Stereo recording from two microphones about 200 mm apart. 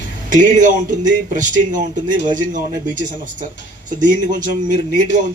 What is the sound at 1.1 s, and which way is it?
A man's voice, 40° right (ahead or behind).